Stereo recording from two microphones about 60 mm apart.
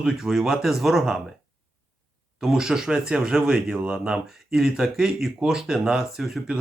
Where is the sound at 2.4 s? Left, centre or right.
Centre.